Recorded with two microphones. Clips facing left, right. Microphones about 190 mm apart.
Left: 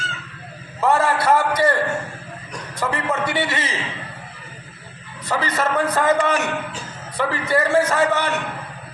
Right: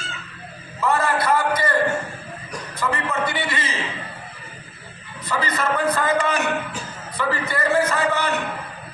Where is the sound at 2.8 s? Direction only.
55° left (ahead or behind).